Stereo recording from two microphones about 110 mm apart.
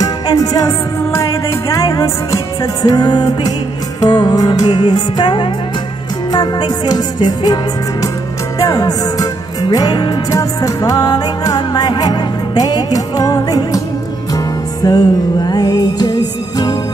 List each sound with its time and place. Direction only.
0.0 s music: 35° left (ahead or behind)
8.5 s music: 35° left (ahead or behind)